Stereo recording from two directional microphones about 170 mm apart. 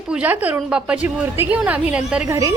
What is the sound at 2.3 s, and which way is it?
Speech, 20° right (ahead or behind).